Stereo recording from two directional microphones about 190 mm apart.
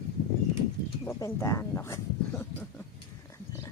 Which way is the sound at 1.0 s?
15° left (ahead or behind).